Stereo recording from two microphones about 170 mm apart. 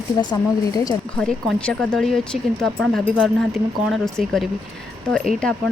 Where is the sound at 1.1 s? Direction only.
5° left (ahead or behind).